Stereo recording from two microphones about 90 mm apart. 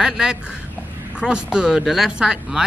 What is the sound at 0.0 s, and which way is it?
Speech, 10° right (ahead or behind).